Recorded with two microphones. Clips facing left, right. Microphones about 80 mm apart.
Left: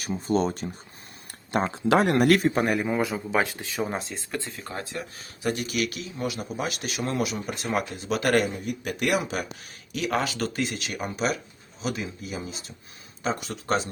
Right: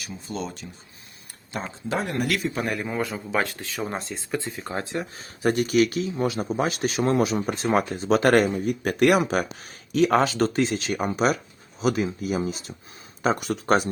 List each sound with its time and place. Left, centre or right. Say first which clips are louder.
0.0 s speech: left 8 dB; left
1.7 s speech: left 6 dB; left
2.3 s a man's voice: left 6 dB; left
2.6 s speech: left 2 dB; centre
3.9 s speech: right 3 dB; centre
4.7 s speech: right 5 dB; right
5.4 s speech: right 7 dB; right
13.2 s speech: right 6 dB; right